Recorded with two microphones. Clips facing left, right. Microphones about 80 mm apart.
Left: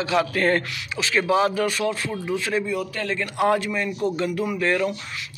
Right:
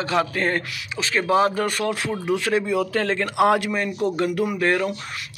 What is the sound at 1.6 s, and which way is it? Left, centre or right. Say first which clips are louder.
Speech: even; right.